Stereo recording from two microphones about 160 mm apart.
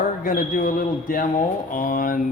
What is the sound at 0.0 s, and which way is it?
Speech, 60° left (ahead or behind).